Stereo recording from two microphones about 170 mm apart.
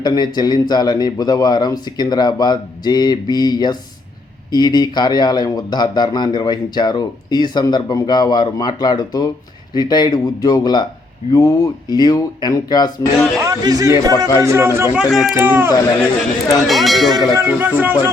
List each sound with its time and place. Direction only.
0.0 s speech: 25° left (ahead or behind)
13.4 s a man's voice: 20° right (ahead or behind)
14.9 s speech: 5° right (ahead or behind)
15.4 s speech: 15° right (ahead or behind)
16.6 s speech: centre (ahead or behind)
17.2 s a man's voice: 20° right (ahead or behind)